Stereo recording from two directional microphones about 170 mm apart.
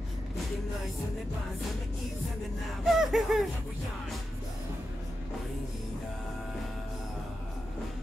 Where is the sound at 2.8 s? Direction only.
Centre (ahead or behind).